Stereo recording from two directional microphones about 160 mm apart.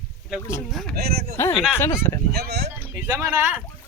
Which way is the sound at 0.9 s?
75° right (ahead or behind).